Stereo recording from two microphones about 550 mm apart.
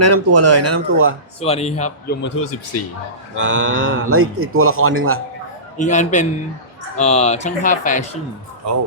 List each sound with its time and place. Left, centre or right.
0.0 s speech: right
1.4 s a man's voice: centre
3.3 s speech: right
5.7 s a man's voice: centre